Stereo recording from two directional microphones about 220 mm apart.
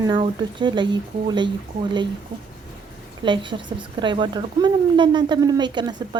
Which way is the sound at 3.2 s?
20° right (ahead or behind).